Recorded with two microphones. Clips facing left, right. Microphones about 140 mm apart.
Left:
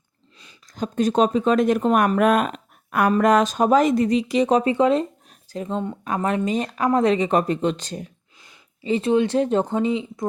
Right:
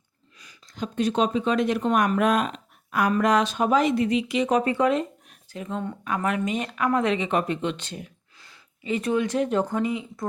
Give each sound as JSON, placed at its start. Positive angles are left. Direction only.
{"t": 0.7, "sound": "speech", "side_deg": 40}
{"t": 4.9, "sound": "a sound", "side_deg": 35}
{"t": 6.1, "sound": "speech", "side_deg": 30}
{"t": 8.8, "sound": "speech", "side_deg": 30}